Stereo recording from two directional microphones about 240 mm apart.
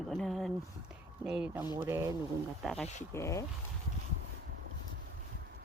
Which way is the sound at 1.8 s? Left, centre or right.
Centre.